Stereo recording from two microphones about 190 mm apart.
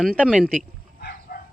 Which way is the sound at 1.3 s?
50° left (ahead or behind).